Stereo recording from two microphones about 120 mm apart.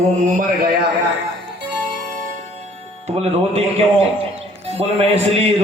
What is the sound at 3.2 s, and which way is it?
A man's voice, 50° right (ahead or behind).